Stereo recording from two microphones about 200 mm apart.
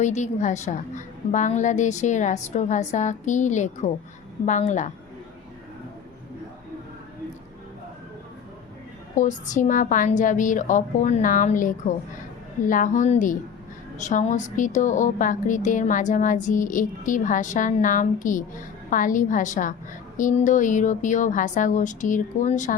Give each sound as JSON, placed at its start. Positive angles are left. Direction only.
{"t": 0.0, "sound": "a woman's voice", "side_deg": 35}
{"t": 9.1, "sound": "a woman's voice", "side_deg": 40}